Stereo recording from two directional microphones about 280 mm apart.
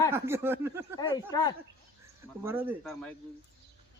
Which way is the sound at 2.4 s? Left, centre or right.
Centre.